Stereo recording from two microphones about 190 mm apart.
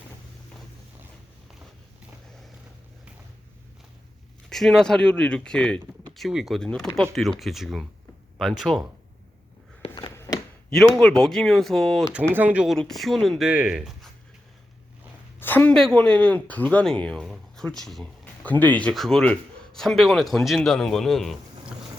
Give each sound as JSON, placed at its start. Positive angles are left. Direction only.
{"t": 4.4, "sound": "speech", "side_deg": 0}
{"t": 9.8, "sound": "a sound", "side_deg": 25}
{"t": 10.7, "sound": "speech", "side_deg": 5}
{"t": 12.3, "sound": "speech", "side_deg": -10}
{"t": 15.4, "sound": "speech", "side_deg": 10}